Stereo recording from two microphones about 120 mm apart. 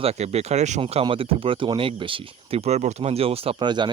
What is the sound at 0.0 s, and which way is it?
Speech, 60° right (ahead or behind).